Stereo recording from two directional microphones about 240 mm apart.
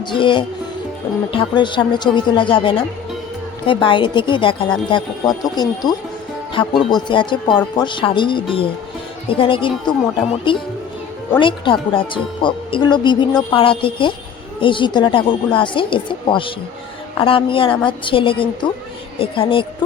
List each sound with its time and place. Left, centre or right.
0.0 s speech: centre
6.9 s speech: centre